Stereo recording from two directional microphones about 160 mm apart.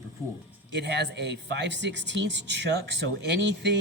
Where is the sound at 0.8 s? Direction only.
90° right.